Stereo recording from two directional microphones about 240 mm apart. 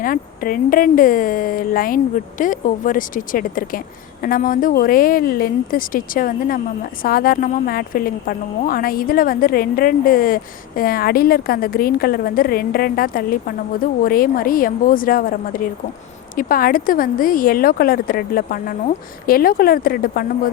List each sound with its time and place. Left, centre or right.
0.0 s a woman's voice: left